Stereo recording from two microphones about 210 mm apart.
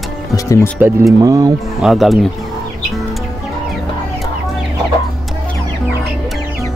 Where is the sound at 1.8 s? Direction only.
Centre (ahead or behind).